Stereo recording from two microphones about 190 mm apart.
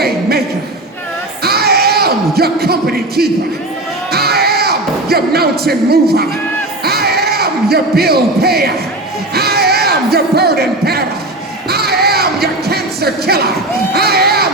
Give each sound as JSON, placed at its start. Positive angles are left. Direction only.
{"t": 0.0, "sound": "a sound", "side_deg": -55}
{"t": 4.1, "sound": "music", "side_deg": -55}
{"t": 13.9, "sound": "crowd", "side_deg": -55}